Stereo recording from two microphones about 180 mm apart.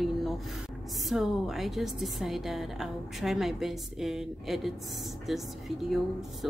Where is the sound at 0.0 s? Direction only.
Centre (ahead or behind).